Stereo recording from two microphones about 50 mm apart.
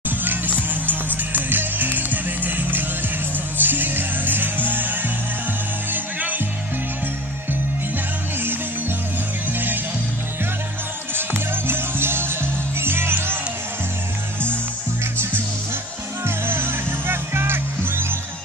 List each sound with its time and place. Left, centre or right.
0.2 s music: right
9.5 s music: right
11.1 s music: right
16.3 s music: right